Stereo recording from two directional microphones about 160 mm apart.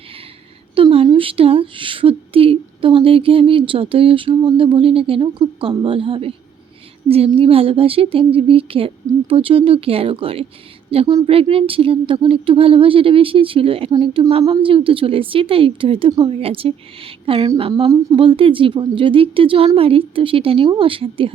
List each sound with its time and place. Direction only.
0.8 s speech: 35° right (ahead or behind)